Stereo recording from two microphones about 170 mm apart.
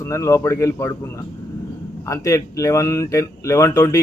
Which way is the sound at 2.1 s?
20° left (ahead or behind).